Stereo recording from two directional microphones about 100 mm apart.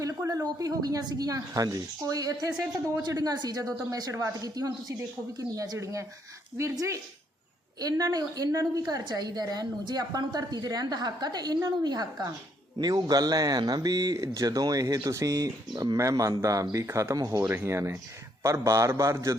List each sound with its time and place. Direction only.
0.0 s a woman's voice: 35° right (ahead or behind)